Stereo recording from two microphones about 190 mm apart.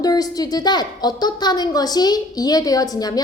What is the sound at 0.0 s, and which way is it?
A woman's voice, 20° left (ahead or behind).